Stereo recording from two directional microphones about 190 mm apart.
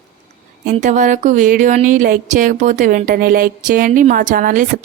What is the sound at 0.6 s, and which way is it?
Speech, 40° right (ahead or behind).